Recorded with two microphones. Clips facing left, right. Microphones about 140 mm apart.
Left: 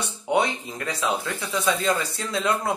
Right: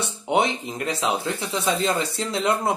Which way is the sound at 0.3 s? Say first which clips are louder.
Right 1 dB; 20° right (ahead or behind).